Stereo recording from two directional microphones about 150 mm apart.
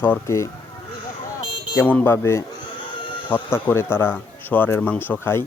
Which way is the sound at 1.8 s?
15° left (ahead or behind).